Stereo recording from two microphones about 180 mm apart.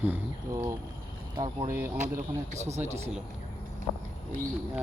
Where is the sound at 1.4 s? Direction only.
15° right (ahead or behind).